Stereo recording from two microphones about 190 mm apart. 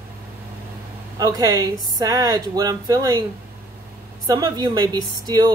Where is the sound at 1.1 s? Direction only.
20° right (ahead or behind).